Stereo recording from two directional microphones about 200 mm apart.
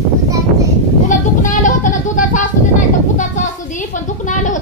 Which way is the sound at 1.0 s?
40° left (ahead or behind).